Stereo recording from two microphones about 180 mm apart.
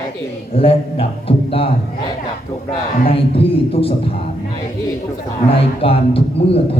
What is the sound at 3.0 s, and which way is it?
Speech, 30° left (ahead or behind).